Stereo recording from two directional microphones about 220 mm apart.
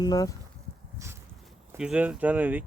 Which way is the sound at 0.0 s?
15° left (ahead or behind).